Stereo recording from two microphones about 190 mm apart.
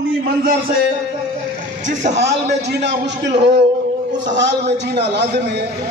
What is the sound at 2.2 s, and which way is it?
A man's voice, 65° right (ahead or behind).